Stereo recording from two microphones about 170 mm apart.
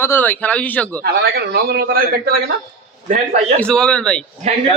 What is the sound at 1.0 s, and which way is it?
A man's voice, 70° right (ahead or behind).